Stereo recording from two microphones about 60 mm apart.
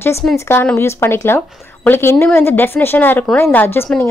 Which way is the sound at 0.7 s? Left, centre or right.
Left.